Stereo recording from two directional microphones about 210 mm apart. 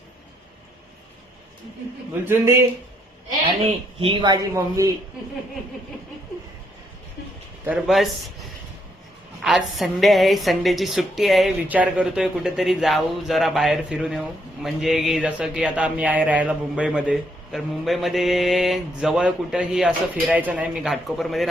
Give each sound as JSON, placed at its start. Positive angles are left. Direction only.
{"t": 2.2, "sound": "speech", "side_deg": -10}
{"t": 4.0, "sound": "speech", "side_deg": -25}
{"t": 7.6, "sound": "a woman's voice", "side_deg": -5}
{"t": 9.4, "sound": "a woman's voice", "side_deg": 0}